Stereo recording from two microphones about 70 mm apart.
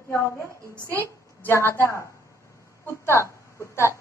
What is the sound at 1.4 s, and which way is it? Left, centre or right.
A woman's voice, left.